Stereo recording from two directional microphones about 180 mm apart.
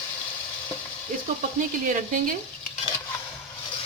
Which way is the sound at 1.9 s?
50° right (ahead or behind).